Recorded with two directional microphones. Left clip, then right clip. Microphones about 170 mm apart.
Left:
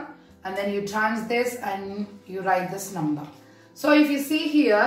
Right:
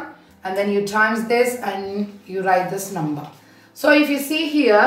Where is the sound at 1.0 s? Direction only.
25° right (ahead or behind).